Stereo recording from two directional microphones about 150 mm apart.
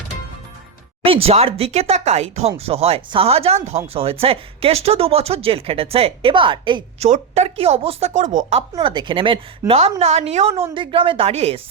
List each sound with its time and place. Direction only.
1.0 s a woman's voice: 40° right (ahead or behind)
7.0 s a woman's voice: 45° right (ahead or behind)
8.7 s a woman's voice: 30° right (ahead or behind)